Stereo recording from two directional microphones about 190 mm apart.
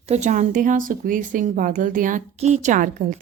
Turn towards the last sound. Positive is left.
turn(degrees=-45)  # may be behind; listen again after turning